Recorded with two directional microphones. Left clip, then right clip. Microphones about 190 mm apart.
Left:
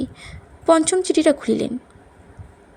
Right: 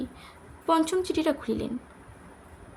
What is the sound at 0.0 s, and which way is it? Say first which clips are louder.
A woman's voice: left 8 dB; 30° left (ahead or behind).